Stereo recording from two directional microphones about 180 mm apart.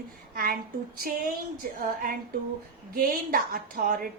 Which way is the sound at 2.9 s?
55° right (ahead or behind).